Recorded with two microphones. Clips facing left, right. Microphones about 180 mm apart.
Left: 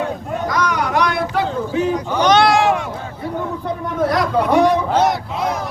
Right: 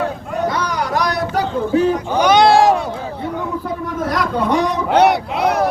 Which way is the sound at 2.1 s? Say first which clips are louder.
Right 1 dB; 10° right (ahead or behind).